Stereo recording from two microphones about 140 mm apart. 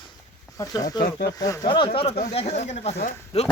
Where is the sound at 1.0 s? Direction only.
75° left (ahead or behind).